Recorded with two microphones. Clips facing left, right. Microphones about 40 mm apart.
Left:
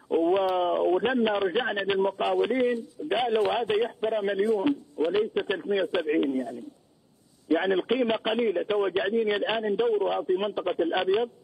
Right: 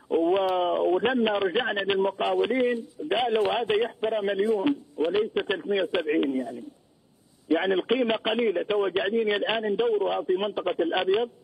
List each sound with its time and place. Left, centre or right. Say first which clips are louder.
0.1 s a sound: even; centre
1.1 s speech: even; centre
1.4 s speech: right 1 dB; centre
7.4 s speech: right 1 dB; centre